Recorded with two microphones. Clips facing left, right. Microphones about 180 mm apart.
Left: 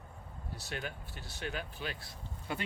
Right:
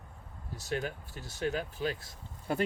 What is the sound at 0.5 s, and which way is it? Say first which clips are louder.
Speech: right 7 dB; 40° right (ahead or behind).